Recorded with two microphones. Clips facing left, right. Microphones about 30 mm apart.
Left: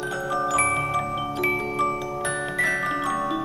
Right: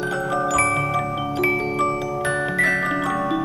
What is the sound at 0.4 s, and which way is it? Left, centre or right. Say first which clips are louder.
Music: right 2 dB; right.